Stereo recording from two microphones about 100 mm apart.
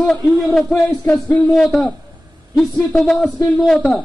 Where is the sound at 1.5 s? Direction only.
Centre (ahead or behind).